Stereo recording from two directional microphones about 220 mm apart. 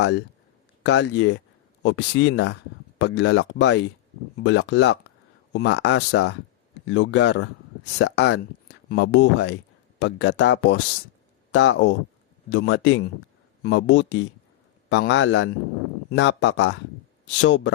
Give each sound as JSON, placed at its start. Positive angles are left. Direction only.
{"t": 0.0, "sound": "a man's voice", "side_deg": 50}